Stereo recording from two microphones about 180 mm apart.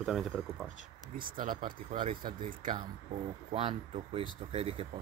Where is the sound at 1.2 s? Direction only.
50° right (ahead or behind).